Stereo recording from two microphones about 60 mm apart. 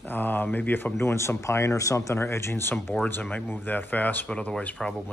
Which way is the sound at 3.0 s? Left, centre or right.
Left.